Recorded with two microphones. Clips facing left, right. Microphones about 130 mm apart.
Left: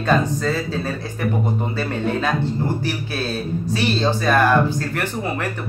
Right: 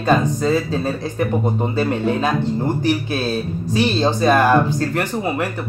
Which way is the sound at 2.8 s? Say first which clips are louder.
Right 5 dB; 15° right (ahead or behind).